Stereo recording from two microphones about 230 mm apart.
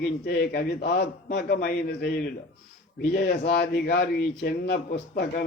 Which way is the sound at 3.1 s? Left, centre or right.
Left.